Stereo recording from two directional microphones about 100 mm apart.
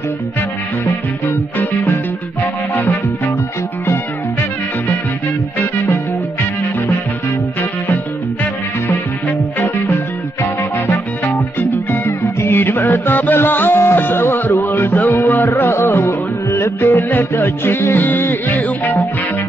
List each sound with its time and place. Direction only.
2.7 s music: 20° left (ahead or behind)
11.9 s music: 20° left (ahead or behind)